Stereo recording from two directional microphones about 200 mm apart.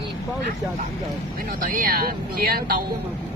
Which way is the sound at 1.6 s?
45° right (ahead or behind).